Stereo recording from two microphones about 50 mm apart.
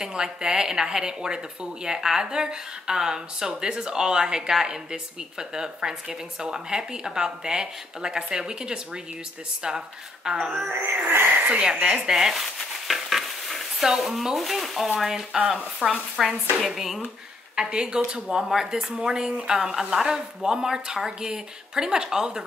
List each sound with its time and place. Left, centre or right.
0.0 s speech: centre
10.7 s speech: right
11.4 s speech: right
12.1 s speech: centre
17.6 s speech: centre